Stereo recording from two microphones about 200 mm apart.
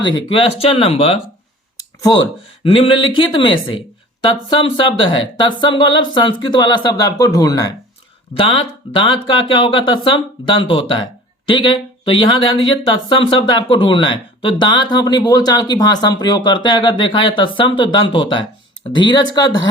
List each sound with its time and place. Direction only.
0.0 s speech: 25° left (ahead or behind)